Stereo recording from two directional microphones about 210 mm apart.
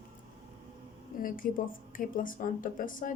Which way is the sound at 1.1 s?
40° left (ahead or behind).